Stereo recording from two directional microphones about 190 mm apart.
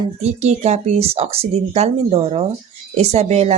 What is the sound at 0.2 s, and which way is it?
Speech, 35° right (ahead or behind).